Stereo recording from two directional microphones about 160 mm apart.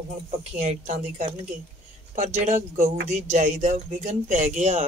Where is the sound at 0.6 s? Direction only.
50° right (ahead or behind).